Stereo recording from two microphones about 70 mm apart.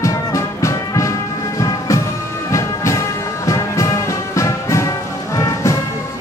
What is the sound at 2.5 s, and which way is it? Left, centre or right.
Music, left.